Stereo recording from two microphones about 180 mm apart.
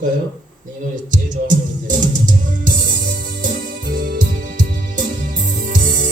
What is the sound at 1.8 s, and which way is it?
Music, 45° right (ahead or behind).